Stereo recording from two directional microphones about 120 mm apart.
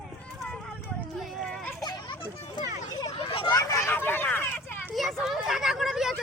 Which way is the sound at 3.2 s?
40° left (ahead or behind).